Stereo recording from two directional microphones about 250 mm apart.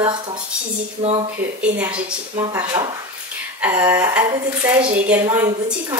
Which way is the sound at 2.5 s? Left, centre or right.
Centre.